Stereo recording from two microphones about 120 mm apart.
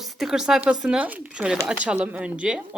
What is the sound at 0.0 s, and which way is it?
Speech, centre (ahead or behind).